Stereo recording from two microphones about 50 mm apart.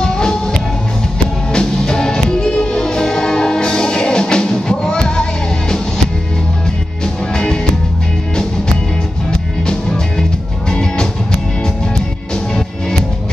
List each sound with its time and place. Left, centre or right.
0.0 s music: centre
1.5 s music: centre
9.7 s music: centre